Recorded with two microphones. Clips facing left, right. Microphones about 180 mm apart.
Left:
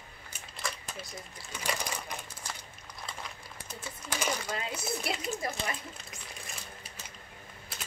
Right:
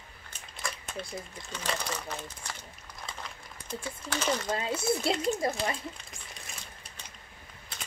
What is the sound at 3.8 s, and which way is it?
Speech, 10° left (ahead or behind).